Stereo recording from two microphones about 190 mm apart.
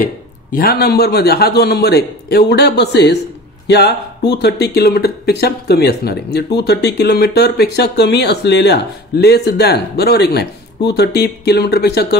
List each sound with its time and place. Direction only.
0.0 s speech: 50° left (ahead or behind)